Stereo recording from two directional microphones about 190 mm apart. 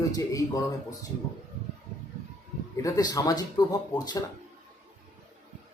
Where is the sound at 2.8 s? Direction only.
20° left (ahead or behind).